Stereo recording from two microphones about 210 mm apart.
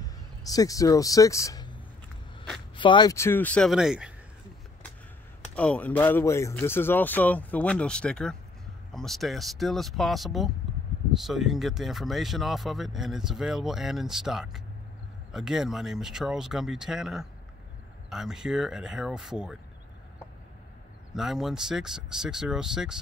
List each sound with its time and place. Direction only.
0.0 s speech: 15° left (ahead or behind); by 4.1 s 5° right (ahead or behind)
5.5 s speech: 5° left (ahead or behind)
21.1 s speech: centre (ahead or behind)